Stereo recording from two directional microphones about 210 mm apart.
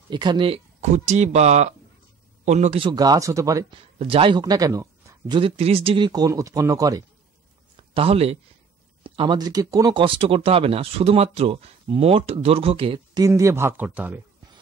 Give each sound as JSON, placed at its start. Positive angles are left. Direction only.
{"t": 0.1, "sound": "speech", "side_deg": -20}
{"t": 4.0, "sound": "speech", "side_deg": -25}
{"t": 7.9, "sound": "speech", "side_deg": -30}